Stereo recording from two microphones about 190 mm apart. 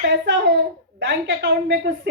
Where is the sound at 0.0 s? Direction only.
65° right (ahead or behind).